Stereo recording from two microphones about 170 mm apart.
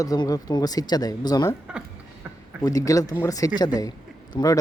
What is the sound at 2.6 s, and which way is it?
A man's voice, 20° left (ahead or behind).